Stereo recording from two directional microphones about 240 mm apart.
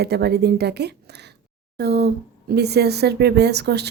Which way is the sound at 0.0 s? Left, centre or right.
Right.